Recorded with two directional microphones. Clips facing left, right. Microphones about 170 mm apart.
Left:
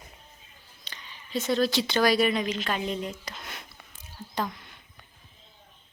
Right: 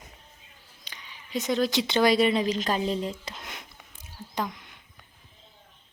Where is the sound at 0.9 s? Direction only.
15° right (ahead or behind); by 3.3 s 30° right (ahead or behind).